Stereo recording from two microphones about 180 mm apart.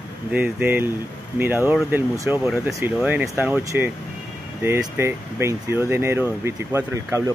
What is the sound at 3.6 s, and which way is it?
Speech, 15° right (ahead or behind).